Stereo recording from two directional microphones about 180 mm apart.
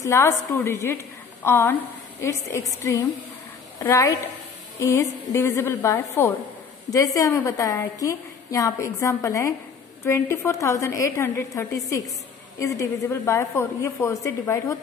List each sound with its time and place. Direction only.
0.0 s a woman's voice: 15° left (ahead or behind)
3.8 s a woman's voice: 15° left (ahead or behind)